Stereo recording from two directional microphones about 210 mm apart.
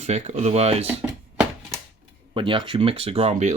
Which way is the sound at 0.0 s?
30° right (ahead or behind).